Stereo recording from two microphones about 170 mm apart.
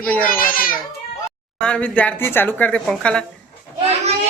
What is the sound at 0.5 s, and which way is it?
Speech, 55° left (ahead or behind).